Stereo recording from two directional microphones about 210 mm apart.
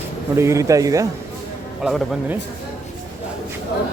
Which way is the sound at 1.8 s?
Centre (ahead or behind).